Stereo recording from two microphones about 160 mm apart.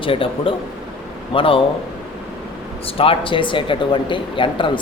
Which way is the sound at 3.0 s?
35° left (ahead or behind).